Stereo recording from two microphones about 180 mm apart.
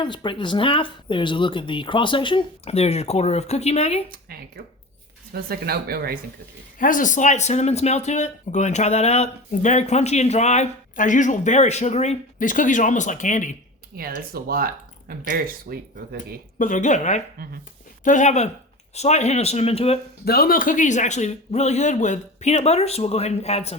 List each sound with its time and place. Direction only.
0.0 s speech: 25° left (ahead or behind)
4.1 s speech: 55° right (ahead or behind)
6.7 s speech: 50° left (ahead or behind)
13.9 s speech: 55° right (ahead or behind)
16.6 s a woman's voice: 45° left (ahead or behind)
20.2 s speech: 60° left (ahead or behind); by 23.7 s 35° left (ahead or behind)